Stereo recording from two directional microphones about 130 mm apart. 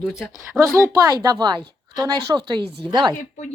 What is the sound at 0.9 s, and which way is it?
A woman's voice, 30° right (ahead or behind).